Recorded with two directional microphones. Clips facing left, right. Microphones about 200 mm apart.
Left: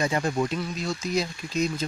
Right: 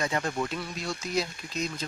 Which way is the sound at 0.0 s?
15° left (ahead or behind).